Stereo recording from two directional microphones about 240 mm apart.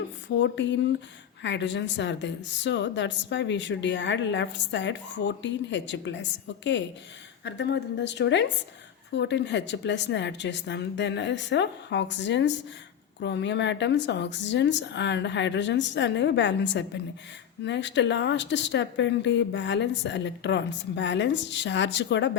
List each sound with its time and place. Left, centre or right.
0.3 s a woman's voice: left
7.4 s a woman's voice: left